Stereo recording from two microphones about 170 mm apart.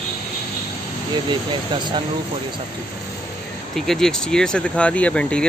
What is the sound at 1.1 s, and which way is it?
Speech, 25° right (ahead or behind).